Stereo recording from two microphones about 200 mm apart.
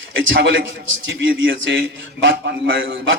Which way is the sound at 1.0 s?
65° right (ahead or behind).